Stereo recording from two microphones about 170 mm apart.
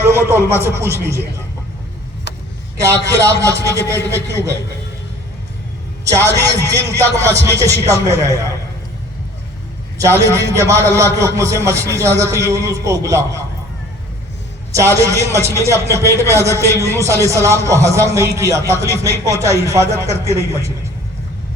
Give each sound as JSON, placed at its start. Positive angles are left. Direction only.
{"t": 0.0, "sound": "speech", "side_deg": -15}
{"t": 2.7, "sound": "a man's voice", "side_deg": -15}
{"t": 6.2, "sound": "a man's voice", "side_deg": 15}
{"t": 6.9, "sound": "speech", "side_deg": -15}
{"t": 10.0, "sound": "a man's voice", "side_deg": -20}
{"t": 14.7, "sound": "a man's voice", "side_deg": -20}